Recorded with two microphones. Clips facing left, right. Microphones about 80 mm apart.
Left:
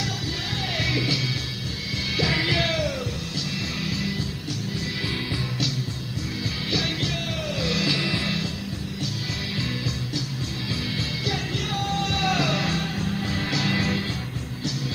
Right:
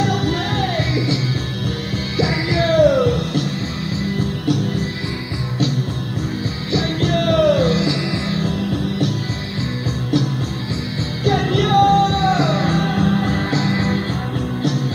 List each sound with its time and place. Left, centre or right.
0.9 s music: right
2.7 s music: right
7.0 s music: right
7.7 s music: right
11.2 s music: right
13.5 s music: right